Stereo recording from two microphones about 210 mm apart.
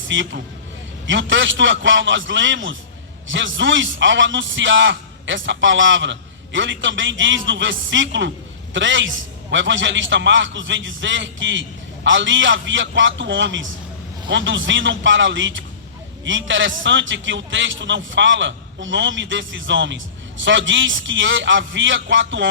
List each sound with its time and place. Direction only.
0.1 s a man's voice: 60° right (ahead or behind)